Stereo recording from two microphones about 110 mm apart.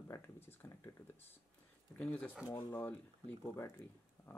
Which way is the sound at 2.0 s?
15° left (ahead or behind).